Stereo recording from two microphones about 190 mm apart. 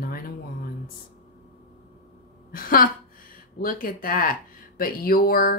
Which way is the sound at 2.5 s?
50° left (ahead or behind).